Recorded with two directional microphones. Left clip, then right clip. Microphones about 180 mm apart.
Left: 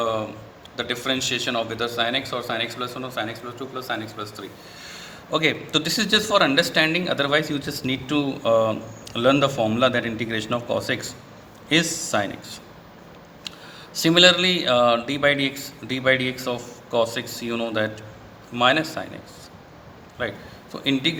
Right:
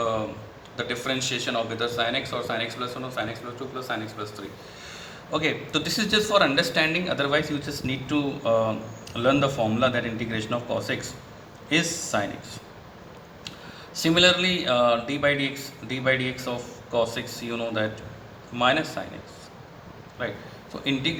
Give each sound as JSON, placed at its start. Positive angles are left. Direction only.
{"t": 0.0, "sound": "a sound", "side_deg": 40}
{"t": 0.8, "sound": "a man's voice", "side_deg": 40}
{"t": 13.9, "sound": "speech", "side_deg": 45}
{"t": 20.2, "sound": "a man's voice", "side_deg": 45}